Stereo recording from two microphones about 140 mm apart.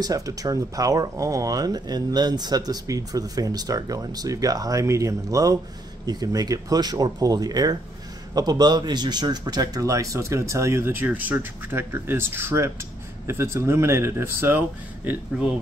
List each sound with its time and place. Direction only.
0.0 s speech: 25° right (ahead or behind)
15.0 s speech: 5° right (ahead or behind)